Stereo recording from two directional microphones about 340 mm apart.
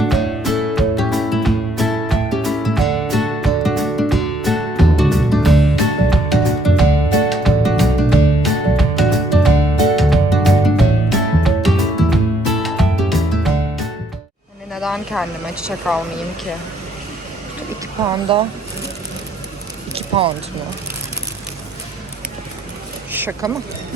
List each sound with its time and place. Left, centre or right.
0.0 s music: centre
14.8 s vehicle: centre
15.9 s speech: centre
18.3 s speech: centre
23.1 s a sound: centre